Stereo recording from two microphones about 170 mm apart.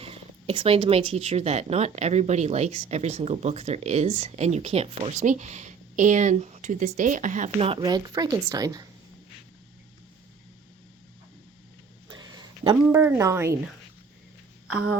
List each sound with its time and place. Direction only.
0.0 s speech: 35° right (ahead or behind)
7.8 s a woman's voice: 25° right (ahead or behind)
12.0 s a sound: 25° right (ahead or behind)
13.0 s a woman's voice: 15° right (ahead or behind)